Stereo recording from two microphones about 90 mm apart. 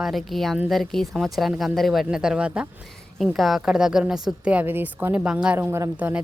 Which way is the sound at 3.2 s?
Centre (ahead or behind).